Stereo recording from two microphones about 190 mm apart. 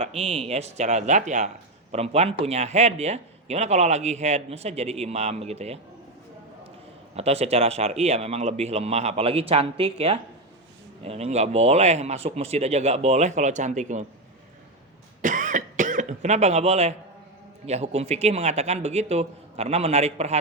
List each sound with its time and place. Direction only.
0.0 s speech: 30° right (ahead or behind)
7.2 s speech: 35° right (ahead or behind)
15.2 s cough: 40° right (ahead or behind)
17.7 s speech: 35° right (ahead or behind)